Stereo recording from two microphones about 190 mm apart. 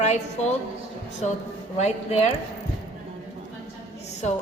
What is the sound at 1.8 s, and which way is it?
Speech, 35° left (ahead or behind).